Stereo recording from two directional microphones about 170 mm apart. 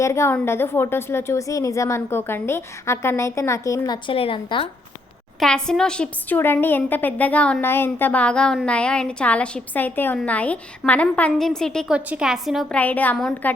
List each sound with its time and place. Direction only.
0.0 s a woman's voice: 15° left (ahead or behind)
5.4 s a woman's voice: 5° left (ahead or behind)